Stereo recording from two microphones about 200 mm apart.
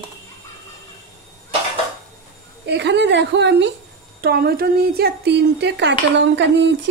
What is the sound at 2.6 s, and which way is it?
A woman's voice, 60° right (ahead or behind).